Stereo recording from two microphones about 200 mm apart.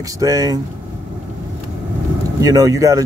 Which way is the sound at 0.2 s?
20° right (ahead or behind).